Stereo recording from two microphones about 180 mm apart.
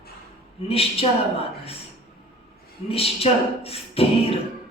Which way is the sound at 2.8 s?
30° left (ahead or behind).